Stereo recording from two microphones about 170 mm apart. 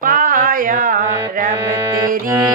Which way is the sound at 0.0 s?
55° right (ahead or behind).